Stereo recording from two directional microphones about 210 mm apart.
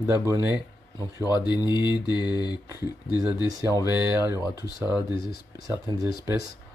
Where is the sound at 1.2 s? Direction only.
20° left (ahead or behind).